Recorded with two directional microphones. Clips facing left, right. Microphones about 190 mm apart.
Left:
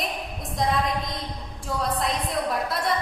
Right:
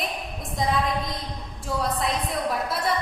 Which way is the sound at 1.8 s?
Centre (ahead or behind).